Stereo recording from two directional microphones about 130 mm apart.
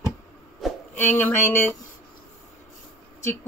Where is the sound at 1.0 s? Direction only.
15° left (ahead or behind).